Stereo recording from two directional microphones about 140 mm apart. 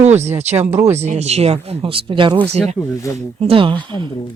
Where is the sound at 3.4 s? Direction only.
40° right (ahead or behind).